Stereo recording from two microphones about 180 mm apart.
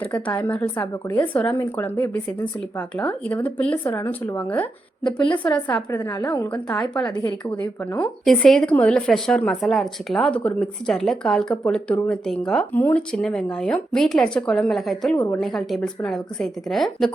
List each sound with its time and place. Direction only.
0.0 s speech: 5° left (ahead or behind)
6.0 s a woman's voice: 25° left (ahead or behind); by 7.0 s 5° left (ahead or behind)
7.0 s a woman's voice: 20° left (ahead or behind)
7.6 s speech: 10° left (ahead or behind)